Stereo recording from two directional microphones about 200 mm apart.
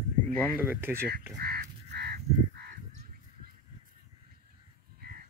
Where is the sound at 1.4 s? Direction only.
50° right (ahead or behind).